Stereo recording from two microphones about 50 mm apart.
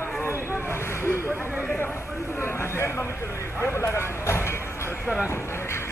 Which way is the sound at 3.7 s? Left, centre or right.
Left.